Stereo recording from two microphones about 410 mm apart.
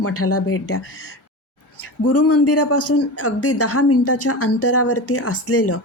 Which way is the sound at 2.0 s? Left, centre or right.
Left.